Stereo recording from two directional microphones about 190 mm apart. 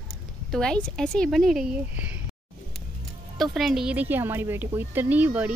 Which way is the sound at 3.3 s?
Centre (ahead or behind).